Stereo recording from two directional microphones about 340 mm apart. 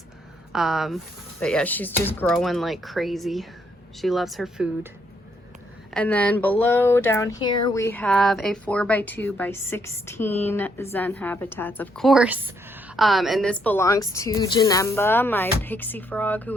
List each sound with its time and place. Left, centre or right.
0.5 s a woman's voice: centre
5.9 s a woman's voice: centre